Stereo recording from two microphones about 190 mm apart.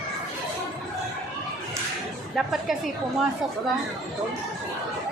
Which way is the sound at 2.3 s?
Centre (ahead or behind).